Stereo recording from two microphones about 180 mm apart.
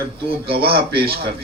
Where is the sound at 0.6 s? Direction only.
60° right (ahead or behind).